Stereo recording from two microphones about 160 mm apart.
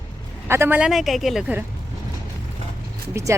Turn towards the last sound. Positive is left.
turn(degrees=-20)  # may be behind; listen again after turning